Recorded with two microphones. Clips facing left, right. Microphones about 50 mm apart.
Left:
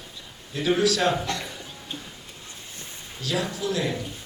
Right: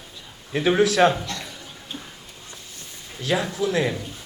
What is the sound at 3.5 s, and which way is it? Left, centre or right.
Speech, right.